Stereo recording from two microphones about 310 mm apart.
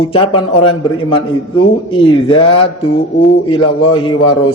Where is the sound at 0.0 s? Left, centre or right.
Centre.